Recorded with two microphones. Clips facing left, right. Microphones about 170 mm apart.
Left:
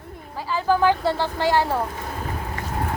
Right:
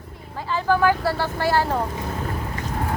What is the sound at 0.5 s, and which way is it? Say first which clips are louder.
Speech: even; 15° left (ahead or behind).